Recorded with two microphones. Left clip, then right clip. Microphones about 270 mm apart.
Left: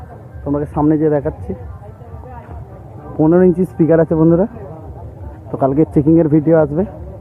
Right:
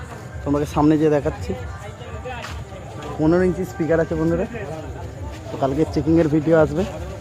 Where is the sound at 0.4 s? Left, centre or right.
Centre.